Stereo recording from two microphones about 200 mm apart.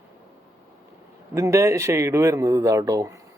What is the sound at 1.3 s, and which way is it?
Speech, 15° right (ahead or behind).